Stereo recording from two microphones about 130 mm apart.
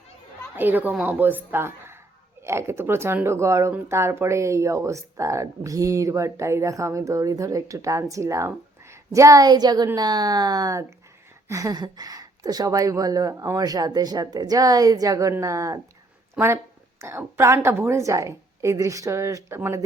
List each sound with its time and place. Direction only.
0.5 s a woman's voice: 15° right (ahead or behind)
17.0 s speech: 20° right (ahead or behind)